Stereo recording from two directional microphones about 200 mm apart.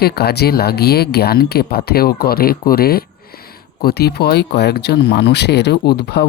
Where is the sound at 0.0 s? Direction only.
55° left (ahead or behind).